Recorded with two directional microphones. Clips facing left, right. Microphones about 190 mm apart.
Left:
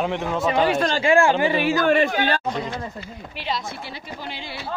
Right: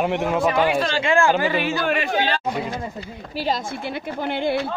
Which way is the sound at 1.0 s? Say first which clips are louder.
Left 3 dB; 30° left (ahead or behind).